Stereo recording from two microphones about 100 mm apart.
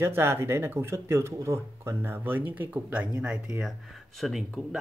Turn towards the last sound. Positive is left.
turn(degrees=-5)  # may be behind; listen again after turning